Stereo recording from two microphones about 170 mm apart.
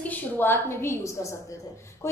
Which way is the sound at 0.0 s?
10° left (ahead or behind).